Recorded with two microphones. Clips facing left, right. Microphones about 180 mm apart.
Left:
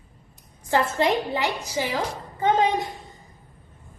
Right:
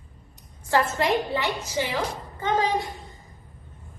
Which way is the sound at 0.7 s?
20° left (ahead or behind).